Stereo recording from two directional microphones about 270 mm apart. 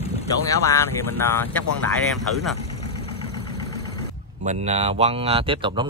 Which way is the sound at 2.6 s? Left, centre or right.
Centre.